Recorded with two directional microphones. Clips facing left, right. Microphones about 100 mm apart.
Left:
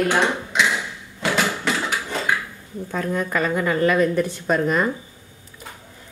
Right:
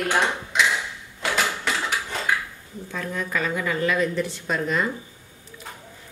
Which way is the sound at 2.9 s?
45° left (ahead or behind).